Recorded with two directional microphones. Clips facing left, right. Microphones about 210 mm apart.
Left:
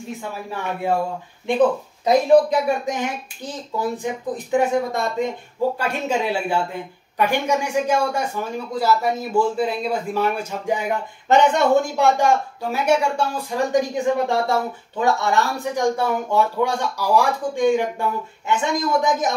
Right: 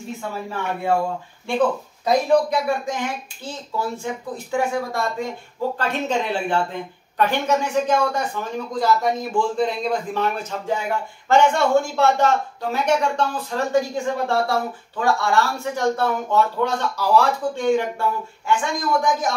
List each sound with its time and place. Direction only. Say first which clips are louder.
2.0 s speech: left 3 dB; 20° left (ahead or behind)
5.8 s a woman's voice: even; 10° left (ahead or behind)